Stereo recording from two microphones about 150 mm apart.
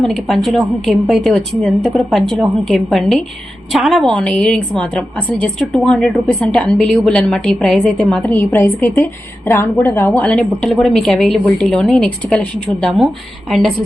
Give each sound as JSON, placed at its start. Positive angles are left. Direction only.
{"t": 0.0, "sound": "a woman's voice", "side_deg": 5}